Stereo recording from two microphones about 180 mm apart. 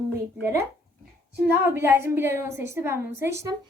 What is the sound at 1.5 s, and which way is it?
A woman's voice, 15° right (ahead or behind).